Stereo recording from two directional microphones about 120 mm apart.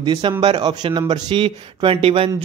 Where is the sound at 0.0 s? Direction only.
40° right (ahead or behind).